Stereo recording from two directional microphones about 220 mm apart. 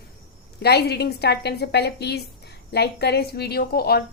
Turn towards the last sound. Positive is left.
turn(degrees=45)  # may be behind; listen again after turning